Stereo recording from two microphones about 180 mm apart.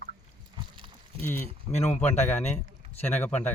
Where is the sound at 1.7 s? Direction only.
40° left (ahead or behind).